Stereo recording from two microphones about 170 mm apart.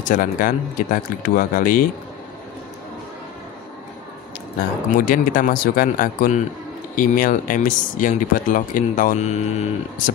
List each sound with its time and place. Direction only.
0.1 s speech: 55° left (ahead or behind)
4.6 s speech: 55° left (ahead or behind)